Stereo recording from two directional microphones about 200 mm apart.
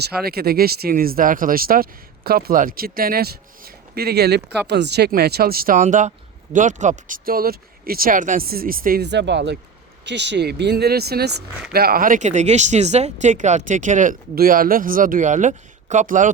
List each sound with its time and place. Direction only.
0.2 s speech: 50° right (ahead or behind)